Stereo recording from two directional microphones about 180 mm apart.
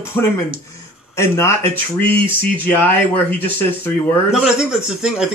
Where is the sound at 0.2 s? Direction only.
15° left (ahead or behind).